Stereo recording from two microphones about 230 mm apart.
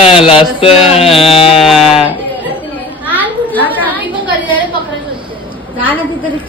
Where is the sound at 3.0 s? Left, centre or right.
Centre.